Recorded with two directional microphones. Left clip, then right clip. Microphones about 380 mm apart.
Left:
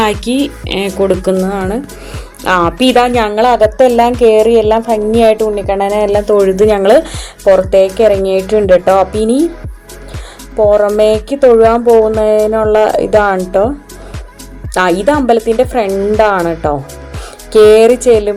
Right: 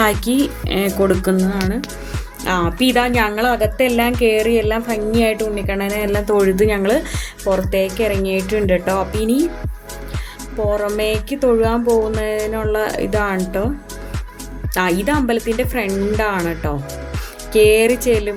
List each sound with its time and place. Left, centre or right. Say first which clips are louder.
0.0 s speech: left 4 dB; right
10.7 s speech: left 10 dB; right
14.7 s speech: left 8 dB; right